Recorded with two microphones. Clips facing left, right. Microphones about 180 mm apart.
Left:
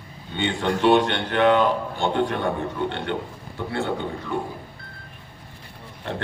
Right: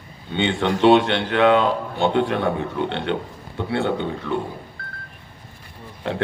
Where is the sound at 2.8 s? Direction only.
65° right (ahead or behind).